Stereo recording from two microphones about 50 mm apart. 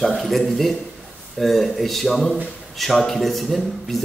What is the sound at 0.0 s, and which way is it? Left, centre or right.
A man's voice, centre.